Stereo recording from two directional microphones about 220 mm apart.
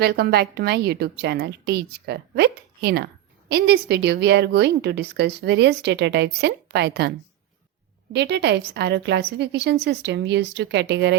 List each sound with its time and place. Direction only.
0.0 s a woman's voice: 45° right (ahead or behind)
8.1 s a woman's voice: 50° right (ahead or behind)